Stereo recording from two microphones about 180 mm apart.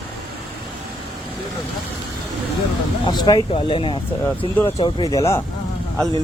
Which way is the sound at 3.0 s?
25° left (ahead or behind).